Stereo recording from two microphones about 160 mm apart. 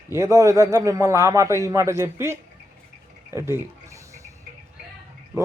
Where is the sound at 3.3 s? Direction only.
15° right (ahead or behind).